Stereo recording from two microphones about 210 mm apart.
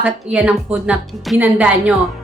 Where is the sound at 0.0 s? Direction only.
5° right (ahead or behind).